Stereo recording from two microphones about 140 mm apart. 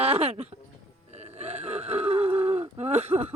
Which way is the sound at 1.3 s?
50° right (ahead or behind).